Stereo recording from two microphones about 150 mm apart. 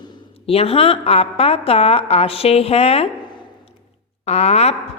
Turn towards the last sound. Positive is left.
turn(degrees=45)  # may be behind; listen again after turning